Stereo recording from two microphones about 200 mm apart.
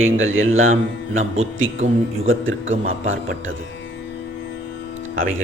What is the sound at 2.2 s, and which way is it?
Speech, 75° right (ahead or behind).